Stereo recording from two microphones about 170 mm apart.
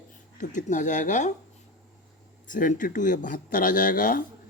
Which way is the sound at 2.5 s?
50° left (ahead or behind).